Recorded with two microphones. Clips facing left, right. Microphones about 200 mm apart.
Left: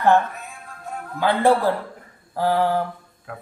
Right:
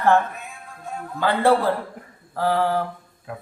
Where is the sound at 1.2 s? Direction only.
15° left (ahead or behind).